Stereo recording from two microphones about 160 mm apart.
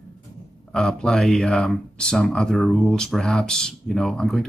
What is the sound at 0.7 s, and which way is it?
Speech, 5° left (ahead or behind).